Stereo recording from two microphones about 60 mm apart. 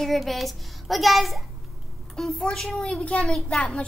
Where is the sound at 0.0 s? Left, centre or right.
Centre.